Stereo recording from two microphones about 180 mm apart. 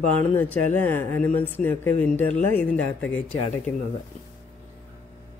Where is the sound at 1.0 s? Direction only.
45° right (ahead or behind).